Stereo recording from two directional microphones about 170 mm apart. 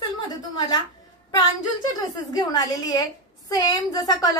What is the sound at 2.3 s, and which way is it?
A woman's voice, 20° left (ahead or behind).